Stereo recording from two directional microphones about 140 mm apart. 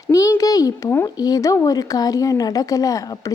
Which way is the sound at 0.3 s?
25° left (ahead or behind).